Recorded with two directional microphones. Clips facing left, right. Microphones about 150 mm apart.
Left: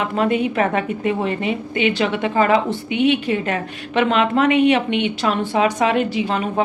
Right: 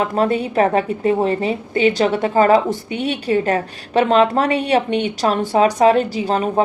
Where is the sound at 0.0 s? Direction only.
35° right (ahead or behind).